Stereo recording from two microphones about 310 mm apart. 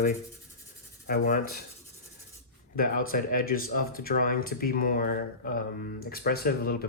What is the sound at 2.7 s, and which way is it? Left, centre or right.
Speech, left.